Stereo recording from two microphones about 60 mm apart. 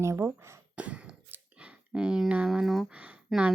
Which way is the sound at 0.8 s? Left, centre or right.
Right.